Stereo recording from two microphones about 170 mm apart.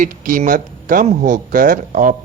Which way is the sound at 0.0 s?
50° right (ahead or behind).